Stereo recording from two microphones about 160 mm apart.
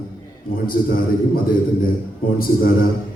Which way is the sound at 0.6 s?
65° left (ahead or behind).